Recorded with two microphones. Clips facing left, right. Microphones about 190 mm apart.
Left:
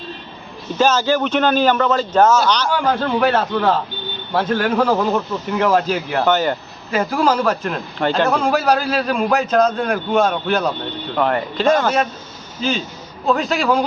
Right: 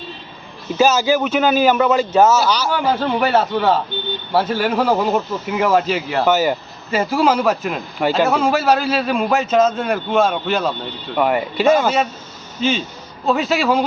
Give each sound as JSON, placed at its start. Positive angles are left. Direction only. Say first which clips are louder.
{"t": 0.8, "sound": "a man's voice", "louder": "right 1 dB", "side_deg": -10}